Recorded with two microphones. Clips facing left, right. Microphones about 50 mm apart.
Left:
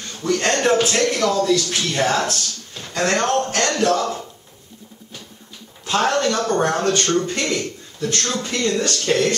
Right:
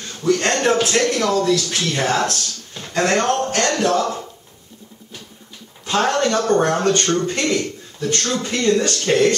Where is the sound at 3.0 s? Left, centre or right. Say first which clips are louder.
Right 1 dB; centre.